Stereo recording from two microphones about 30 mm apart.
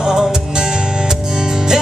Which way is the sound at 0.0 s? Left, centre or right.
Right.